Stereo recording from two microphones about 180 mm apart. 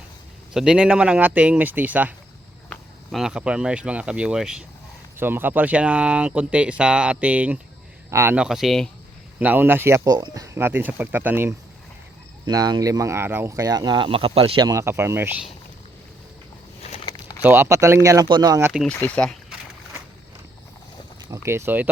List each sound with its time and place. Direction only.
0.5 s speech: 5° right (ahead or behind)
9.4 s speech: 10° right (ahead or behind)
12.5 s speech: 20° right (ahead or behind)
16.8 s a sound: 35° left (ahead or behind)
17.4 s speech: 15° right (ahead or behind)
18.7 s speech: centre (ahead or behind)
21.2 s speech: 15° right (ahead or behind)